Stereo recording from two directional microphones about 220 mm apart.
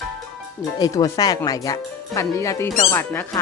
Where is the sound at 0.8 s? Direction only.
15° left (ahead or behind).